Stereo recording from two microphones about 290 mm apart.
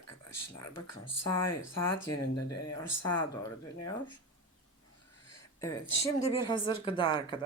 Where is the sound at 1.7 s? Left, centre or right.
Left.